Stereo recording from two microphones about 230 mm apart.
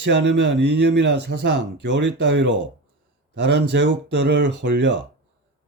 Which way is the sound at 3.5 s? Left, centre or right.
Right.